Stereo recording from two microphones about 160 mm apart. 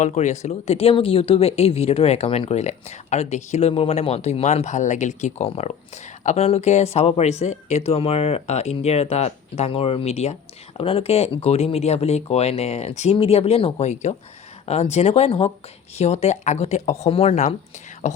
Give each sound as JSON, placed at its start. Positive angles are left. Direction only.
{"t": 0.0, "sound": "speech", "side_deg": 45}